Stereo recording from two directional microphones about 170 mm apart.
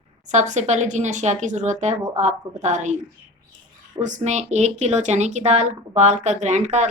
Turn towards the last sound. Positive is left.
turn(degrees=-45)  # may be behind; listen again after turning